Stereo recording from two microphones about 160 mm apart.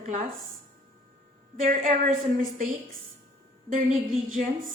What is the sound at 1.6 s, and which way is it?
A woman's voice, 55° right (ahead or behind).